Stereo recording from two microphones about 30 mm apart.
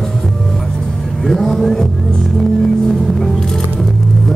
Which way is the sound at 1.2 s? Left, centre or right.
Centre.